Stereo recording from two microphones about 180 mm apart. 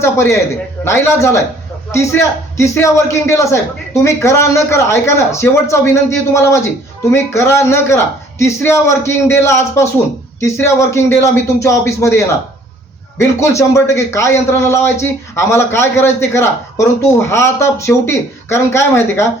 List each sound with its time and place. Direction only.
0.0 s a man's voice: 15° left (ahead or behind)